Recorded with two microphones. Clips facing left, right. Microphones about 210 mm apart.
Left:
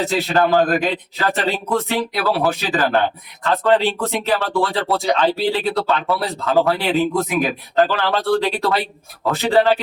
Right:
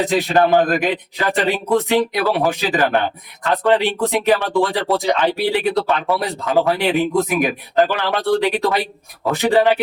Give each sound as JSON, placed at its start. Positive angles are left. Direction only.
{"t": 0.0, "sound": "speech", "side_deg": -15}